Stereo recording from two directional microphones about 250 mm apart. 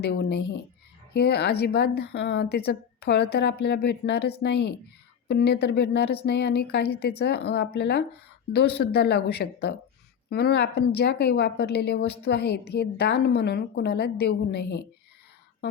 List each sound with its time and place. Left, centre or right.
0.0 s a woman's voice: left